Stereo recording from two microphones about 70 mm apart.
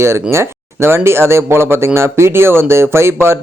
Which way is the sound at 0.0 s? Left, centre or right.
Right.